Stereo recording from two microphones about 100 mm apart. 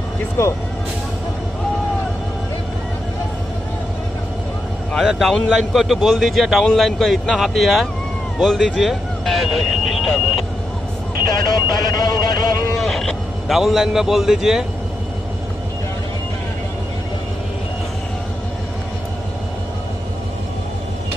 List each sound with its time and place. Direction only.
0.4 s speech: 25° left (ahead or behind)
4.9 s a man's voice: centre (ahead or behind)
11.2 s speech: 40° left (ahead or behind)
12.8 s speech: 5° left (ahead or behind)